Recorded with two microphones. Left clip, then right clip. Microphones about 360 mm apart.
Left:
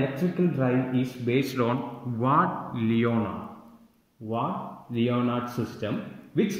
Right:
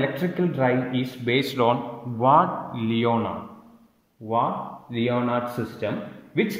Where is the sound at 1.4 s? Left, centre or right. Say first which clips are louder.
Right 8 dB; centre.